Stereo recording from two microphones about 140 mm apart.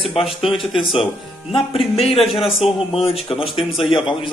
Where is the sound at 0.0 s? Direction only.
40° left (ahead or behind).